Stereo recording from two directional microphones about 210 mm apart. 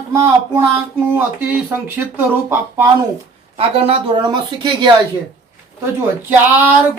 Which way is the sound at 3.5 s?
30° right (ahead or behind).